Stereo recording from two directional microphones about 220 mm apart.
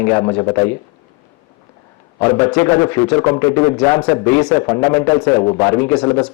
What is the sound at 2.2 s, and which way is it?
A man's voice, 15° left (ahead or behind).